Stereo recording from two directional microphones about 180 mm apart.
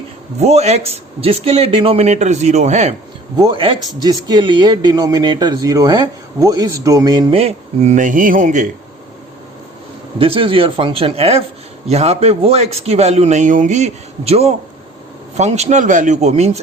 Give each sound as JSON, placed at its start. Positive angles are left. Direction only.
{"t": 0.3, "sound": "a man's voice", "side_deg": -35}
{"t": 3.3, "sound": "a man's voice", "side_deg": -25}
{"t": 10.2, "sound": "a man's voice", "side_deg": -30}